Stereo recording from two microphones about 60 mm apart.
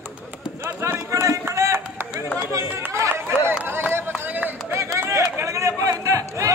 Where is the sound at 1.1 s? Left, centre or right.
Right.